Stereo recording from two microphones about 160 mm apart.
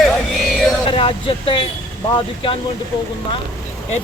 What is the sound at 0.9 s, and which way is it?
Speech, 35° left (ahead or behind).